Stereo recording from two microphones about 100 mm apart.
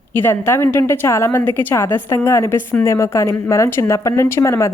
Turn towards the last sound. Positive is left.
turn(degrees=30)  # may be behind; listen again after turning